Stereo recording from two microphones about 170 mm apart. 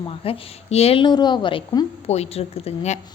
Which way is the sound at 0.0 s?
35° left (ahead or behind).